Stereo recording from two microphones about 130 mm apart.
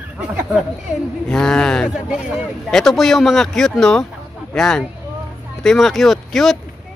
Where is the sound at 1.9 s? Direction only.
5° right (ahead or behind).